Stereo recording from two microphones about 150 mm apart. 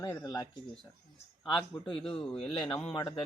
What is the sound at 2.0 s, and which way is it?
Speech, 5° left (ahead or behind).